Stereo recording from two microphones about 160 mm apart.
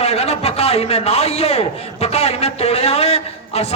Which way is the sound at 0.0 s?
40° left (ahead or behind).